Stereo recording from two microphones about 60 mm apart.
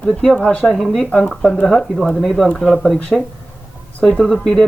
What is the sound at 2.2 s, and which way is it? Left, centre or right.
Speech, centre.